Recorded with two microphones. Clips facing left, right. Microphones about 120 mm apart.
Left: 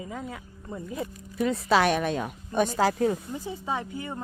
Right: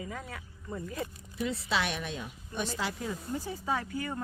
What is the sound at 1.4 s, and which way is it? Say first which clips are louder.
A woman's voice: left 9 dB; 50° left (ahead or behind).